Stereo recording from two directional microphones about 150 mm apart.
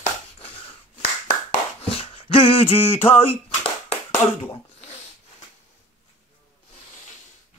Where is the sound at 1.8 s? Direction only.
40° left (ahead or behind).